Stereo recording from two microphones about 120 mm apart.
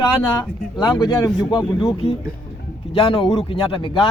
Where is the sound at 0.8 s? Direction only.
35° left (ahead or behind).